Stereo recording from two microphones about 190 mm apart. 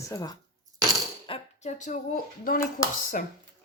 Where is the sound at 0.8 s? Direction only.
20° right (ahead or behind).